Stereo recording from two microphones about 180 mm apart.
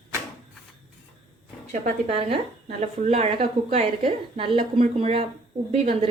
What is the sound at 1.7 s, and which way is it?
A woman's voice, 45° right (ahead or behind).